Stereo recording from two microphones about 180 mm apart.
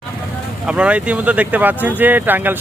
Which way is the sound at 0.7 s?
5° right (ahead or behind).